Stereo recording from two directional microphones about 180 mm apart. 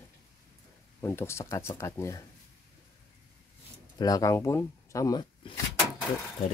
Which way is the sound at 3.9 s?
20° left (ahead or behind).